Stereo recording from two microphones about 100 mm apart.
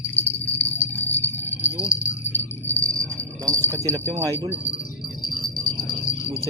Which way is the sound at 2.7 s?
30° right (ahead or behind).